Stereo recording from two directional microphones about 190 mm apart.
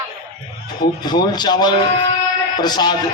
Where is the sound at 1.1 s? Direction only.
20° left (ahead or behind).